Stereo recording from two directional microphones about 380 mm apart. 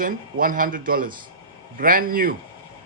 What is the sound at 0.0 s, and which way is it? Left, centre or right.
A man's voice, right.